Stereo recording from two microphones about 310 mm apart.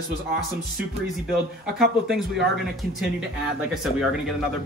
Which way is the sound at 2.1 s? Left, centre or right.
Centre.